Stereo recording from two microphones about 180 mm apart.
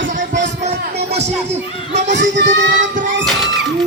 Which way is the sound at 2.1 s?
75° right (ahead or behind).